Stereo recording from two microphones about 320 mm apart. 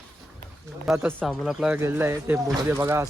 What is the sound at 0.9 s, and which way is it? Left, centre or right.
Speech, centre.